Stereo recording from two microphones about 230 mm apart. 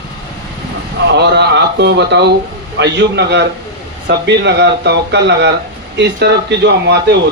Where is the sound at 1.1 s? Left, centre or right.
Right.